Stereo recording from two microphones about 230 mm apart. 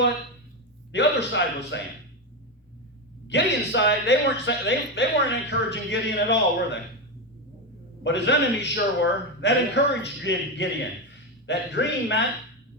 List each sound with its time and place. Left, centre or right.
0.9 s speech: left
3.2 s speech: left
8.0 s speech: left